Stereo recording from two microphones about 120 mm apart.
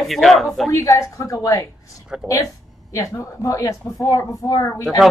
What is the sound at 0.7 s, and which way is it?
Speech, 25° left (ahead or behind).